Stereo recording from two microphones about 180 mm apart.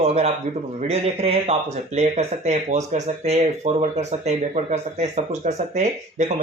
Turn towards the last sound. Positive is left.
turn(degrees=-45)  # may be behind; listen again after turning